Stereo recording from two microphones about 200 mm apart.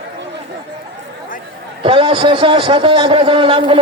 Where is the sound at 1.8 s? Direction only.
25° right (ahead or behind).